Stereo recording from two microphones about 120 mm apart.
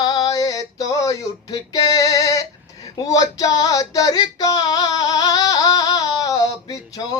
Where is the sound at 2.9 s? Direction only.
30° left (ahead or behind).